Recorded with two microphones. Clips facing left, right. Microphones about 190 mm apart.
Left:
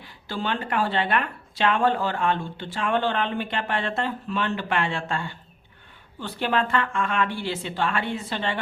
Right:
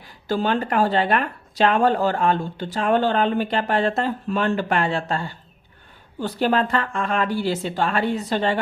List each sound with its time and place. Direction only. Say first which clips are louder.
0.0 s speech: right 7 dB; 45° right (ahead or behind)